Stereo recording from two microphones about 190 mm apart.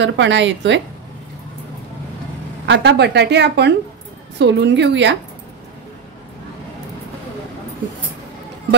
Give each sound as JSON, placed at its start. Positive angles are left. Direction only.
{"t": 0.0, "sound": "a woman's voice", "side_deg": -70}
{"t": 2.6, "sound": "a woman's voice", "side_deg": -65}